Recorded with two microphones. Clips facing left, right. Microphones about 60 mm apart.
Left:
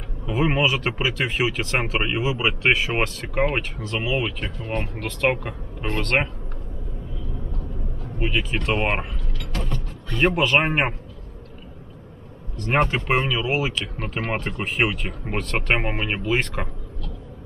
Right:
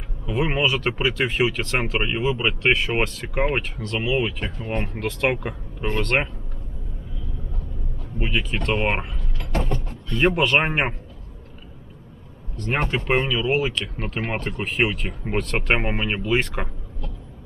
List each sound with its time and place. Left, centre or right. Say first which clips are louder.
0.3 s speech: left 1 dB; centre
8.2 s speech: left 1 dB; centre
9.5 s mechanisms: right 5 dB; right
10.2 s speech: even; centre
12.7 s speech: left 4 dB; centre
13.1 s speech: right 1 dB; centre